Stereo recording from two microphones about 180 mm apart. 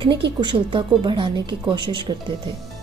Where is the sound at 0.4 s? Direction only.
25° right (ahead or behind).